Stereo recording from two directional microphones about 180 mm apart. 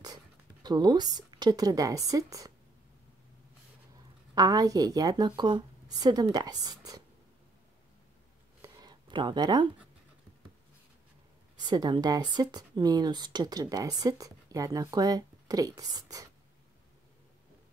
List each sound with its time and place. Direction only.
0.0 s speech: 20° right (ahead or behind)
4.4 s speech: 20° right (ahead or behind)
8.6 s a sound: 20° right (ahead or behind)
11.6 s speech: 25° right (ahead or behind)